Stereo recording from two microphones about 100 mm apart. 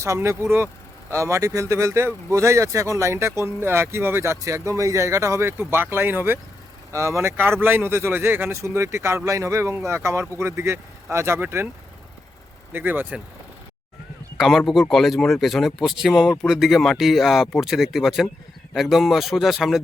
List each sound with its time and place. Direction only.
0.0 s speech: 25° right (ahead or behind)
8.5 s speech: 30° right (ahead or behind)
12.7 s speech: 20° right (ahead or behind)
14.3 s a man's voice: centre (ahead or behind)